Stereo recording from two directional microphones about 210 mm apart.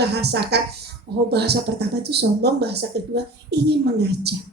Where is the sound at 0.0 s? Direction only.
50° right (ahead or behind).